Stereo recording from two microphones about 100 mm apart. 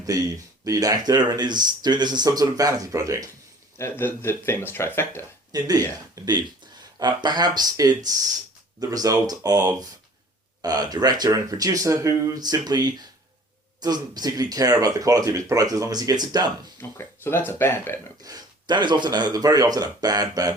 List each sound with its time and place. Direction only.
0.0 s speech: 35° right (ahead or behind)
3.8 s speech: 25° left (ahead or behind)
5.5 s speech: 40° right (ahead or behind)
17.0 s speech: 20° left (ahead or behind)
18.2 s speech: 40° right (ahead or behind)